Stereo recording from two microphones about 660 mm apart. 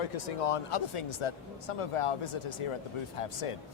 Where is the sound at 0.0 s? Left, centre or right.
Left.